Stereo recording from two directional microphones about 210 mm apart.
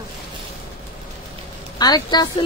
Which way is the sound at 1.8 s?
20° left (ahead or behind).